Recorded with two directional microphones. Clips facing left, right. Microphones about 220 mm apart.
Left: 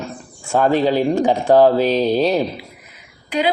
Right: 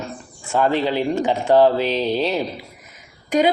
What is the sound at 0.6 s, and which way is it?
Speech, 45° left (ahead or behind).